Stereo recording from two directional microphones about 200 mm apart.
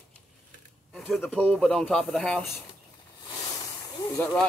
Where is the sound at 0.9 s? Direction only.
Centre (ahead or behind).